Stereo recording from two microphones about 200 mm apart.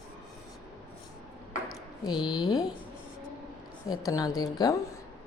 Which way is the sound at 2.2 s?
20° left (ahead or behind).